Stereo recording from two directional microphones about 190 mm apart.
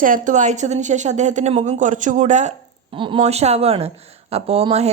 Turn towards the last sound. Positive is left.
turn(degrees=-30)  # may be behind; listen again after turning